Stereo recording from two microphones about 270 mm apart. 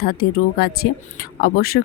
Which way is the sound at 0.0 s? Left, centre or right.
Left.